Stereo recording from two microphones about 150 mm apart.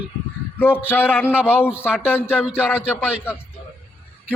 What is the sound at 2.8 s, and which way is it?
Speech, 5° right (ahead or behind).